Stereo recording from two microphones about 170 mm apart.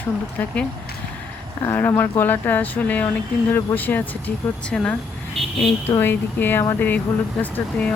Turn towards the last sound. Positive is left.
turn(degrees=10)  # may be behind; listen again after turning